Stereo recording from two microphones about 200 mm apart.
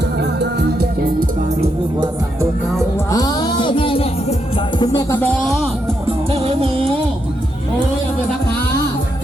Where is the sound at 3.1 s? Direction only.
20° left (ahead or behind); by 5.7 s centre (ahead or behind).